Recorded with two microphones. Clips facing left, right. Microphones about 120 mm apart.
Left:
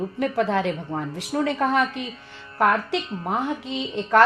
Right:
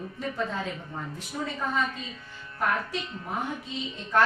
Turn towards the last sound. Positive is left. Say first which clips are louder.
# left 8 dB
turn(degrees=80)